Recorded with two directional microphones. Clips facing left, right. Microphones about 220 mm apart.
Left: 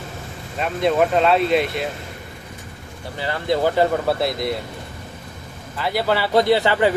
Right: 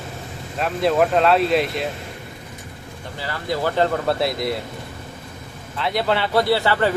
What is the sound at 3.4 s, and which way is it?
Speech, 15° left (ahead or behind).